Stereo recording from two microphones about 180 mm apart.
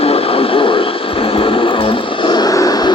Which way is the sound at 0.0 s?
35° left (ahead or behind).